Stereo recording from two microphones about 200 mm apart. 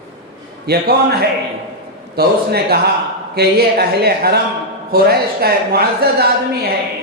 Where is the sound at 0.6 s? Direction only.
50° right (ahead or behind).